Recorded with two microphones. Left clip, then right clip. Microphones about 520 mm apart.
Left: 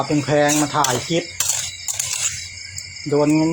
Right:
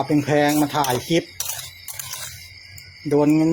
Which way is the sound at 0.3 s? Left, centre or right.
Right.